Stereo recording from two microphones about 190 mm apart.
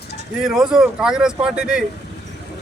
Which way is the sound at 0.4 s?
5° right (ahead or behind).